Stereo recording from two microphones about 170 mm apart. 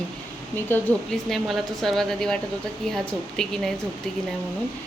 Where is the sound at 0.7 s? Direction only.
5° left (ahead or behind).